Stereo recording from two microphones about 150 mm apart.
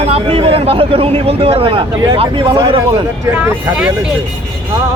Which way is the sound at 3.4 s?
10° right (ahead or behind).